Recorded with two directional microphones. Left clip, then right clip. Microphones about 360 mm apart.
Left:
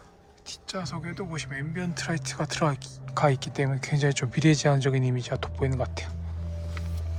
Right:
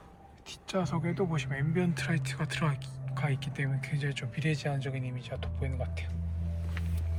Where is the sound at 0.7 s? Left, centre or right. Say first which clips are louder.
Right 2 dB; centre.